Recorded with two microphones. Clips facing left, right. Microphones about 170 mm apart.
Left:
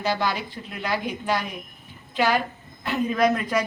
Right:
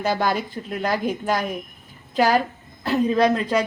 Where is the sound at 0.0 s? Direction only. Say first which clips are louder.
Right 3 dB; 50° right (ahead or behind).